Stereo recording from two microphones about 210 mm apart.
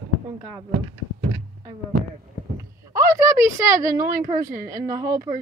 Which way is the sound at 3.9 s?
40° right (ahead or behind).